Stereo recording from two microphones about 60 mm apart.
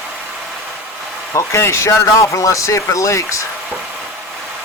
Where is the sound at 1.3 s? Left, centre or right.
Left.